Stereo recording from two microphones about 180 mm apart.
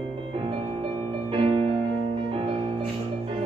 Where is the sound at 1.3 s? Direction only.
30° right (ahead or behind).